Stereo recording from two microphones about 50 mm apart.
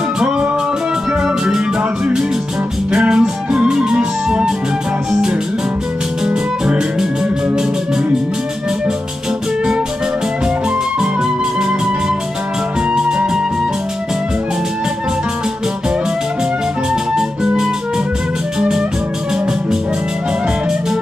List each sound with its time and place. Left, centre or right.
1.2 s music: centre
2.9 s music: centre
6.2 s music: centre
12.9 s music: centre
18.6 s music: centre